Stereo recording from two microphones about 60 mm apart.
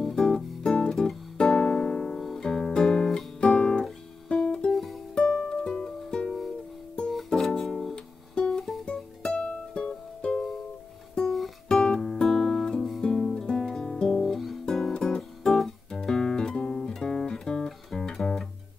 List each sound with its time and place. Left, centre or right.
0.1 s music: centre
7.1 s music: centre
11.1 s music: centre
11.7 s guitar: centre
14.2 s guitar: centre
14.7 s music: centre